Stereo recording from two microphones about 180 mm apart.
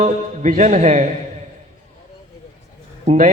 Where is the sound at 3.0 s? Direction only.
45° right (ahead or behind).